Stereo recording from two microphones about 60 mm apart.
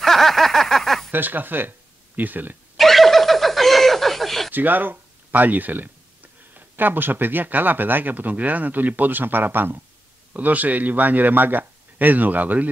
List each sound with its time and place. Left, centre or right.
0.0 s a sound: centre
1.1 s speech: right
2.8 s snicker: centre
4.5 s a man's voice: right